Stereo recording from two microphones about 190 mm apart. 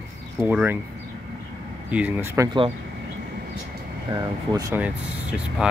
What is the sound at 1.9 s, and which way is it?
Speech, 10° right (ahead or behind).